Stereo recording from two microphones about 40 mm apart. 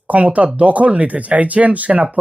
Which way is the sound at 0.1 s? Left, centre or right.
Right.